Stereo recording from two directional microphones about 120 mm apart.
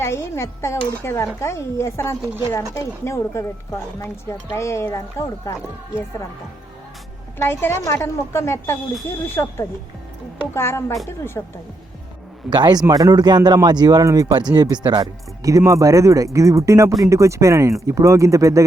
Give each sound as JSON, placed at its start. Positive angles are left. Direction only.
{"t": 0.0, "sound": "a woman's voice", "side_deg": 25}
{"t": 7.3, "sound": "a woman's voice", "side_deg": 20}
{"t": 12.5, "sound": "a man's voice", "side_deg": -35}